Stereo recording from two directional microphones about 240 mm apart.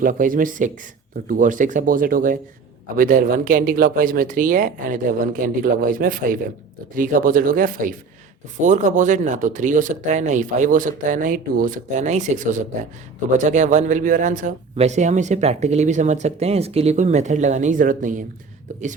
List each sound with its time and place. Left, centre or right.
0.0 s speech: right